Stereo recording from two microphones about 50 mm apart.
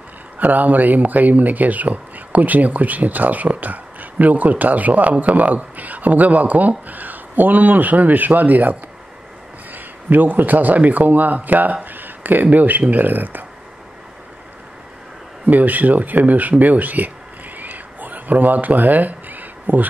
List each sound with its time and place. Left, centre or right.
0.4 s speech: right
15.4 s speech: right
17.6 s a sound: right